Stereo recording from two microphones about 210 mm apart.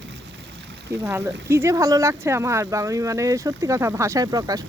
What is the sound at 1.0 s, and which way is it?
Speech, 15° right (ahead or behind).